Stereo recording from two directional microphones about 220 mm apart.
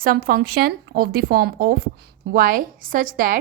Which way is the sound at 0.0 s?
40° right (ahead or behind).